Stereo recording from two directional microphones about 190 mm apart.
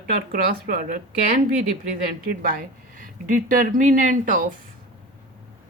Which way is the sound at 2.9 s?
45° right (ahead or behind).